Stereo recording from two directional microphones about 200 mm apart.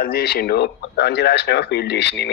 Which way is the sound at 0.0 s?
50° left (ahead or behind).